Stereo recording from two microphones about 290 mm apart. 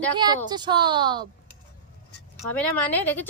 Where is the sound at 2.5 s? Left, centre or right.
Centre.